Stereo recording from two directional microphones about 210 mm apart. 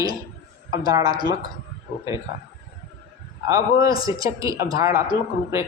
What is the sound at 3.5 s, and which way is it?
A man's voice, 15° right (ahead or behind).